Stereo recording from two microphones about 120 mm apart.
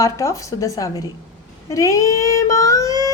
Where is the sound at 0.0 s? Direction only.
25° left (ahead or behind).